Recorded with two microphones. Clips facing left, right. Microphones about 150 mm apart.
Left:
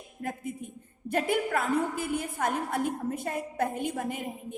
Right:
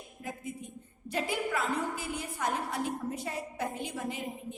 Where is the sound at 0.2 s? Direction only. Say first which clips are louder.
Left 5 dB; 55° left (ahead or behind).